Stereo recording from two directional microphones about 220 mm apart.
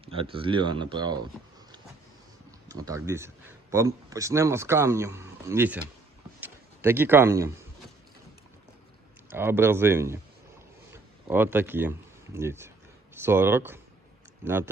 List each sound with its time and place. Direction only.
0.0 s speech: 25° right (ahead or behind)
2.6 s speech: 15° right (ahead or behind)
6.4 s a sound: 10° right (ahead or behind)
9.3 s speech: 10° right (ahead or behind)